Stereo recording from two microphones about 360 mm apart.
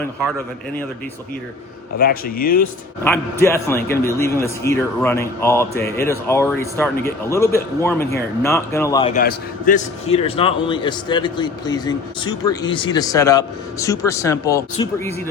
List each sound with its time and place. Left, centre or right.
2.0 s speech: left
3.4 s a man's voice: centre